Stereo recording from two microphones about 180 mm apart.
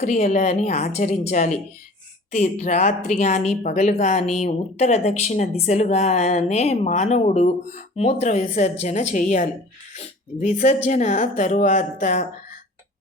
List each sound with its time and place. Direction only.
0.0 s a woman's voice: 40° left (ahead or behind)